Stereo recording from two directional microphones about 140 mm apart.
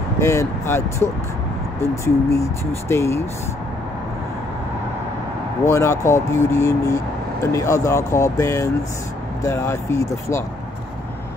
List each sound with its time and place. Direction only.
0.2 s speech: 20° left (ahead or behind)
5.7 s speech: 20° left (ahead or behind)